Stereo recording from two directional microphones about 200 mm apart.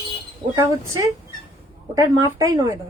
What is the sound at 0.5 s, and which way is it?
Speech, 15° right (ahead or behind).